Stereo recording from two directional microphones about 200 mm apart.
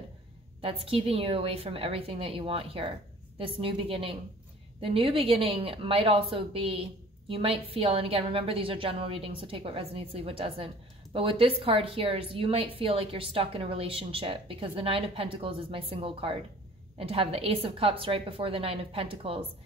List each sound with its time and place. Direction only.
0.6 s a woman's voice: 25° right (ahead or behind)